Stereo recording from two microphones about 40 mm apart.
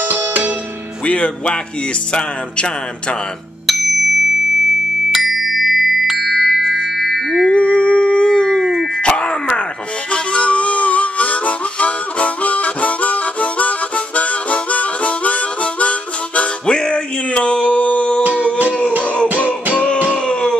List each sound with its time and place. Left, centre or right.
0.0 s music: right
1.0 s music: left
3.6 s music: centre
7.5 s howl: left
8.9 s groan: left
10.1 s harmonica: left
16.6 s music: left
19.2 s music: right
19.7 s music: left
20.1 s a sound: left